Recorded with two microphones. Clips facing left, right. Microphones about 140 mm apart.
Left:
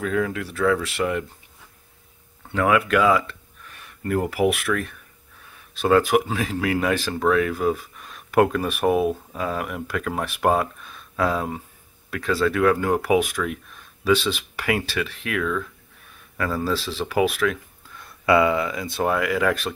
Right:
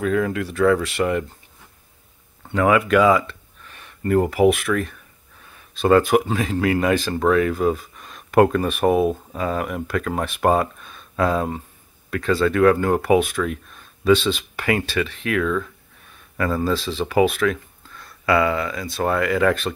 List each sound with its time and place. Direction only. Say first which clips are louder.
0.0 s speech: right 3 dB; centre (ahead or behind)
2.5 s speech: right 3 dB; centre (ahead or behind)
17.9 s speech: left 1 dB; 20° left (ahead or behind)
19.0 s speech: right 3 dB; 5° left (ahead or behind)